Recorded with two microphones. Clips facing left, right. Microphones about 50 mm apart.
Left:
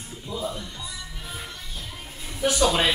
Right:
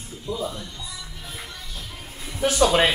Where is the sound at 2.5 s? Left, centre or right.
Centre.